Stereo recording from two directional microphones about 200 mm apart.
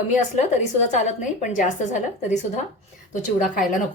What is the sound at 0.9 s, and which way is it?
A woman's voice, 35° left (ahead or behind).